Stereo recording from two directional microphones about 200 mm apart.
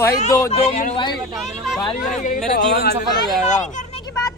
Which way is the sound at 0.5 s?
35° left (ahead or behind).